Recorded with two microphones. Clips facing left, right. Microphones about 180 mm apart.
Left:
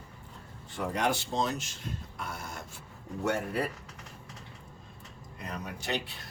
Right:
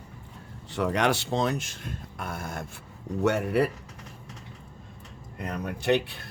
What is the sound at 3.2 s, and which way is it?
Speech, 70° right (ahead or behind).